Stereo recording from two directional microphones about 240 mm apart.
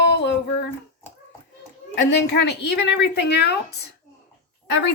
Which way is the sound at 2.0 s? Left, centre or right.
Left.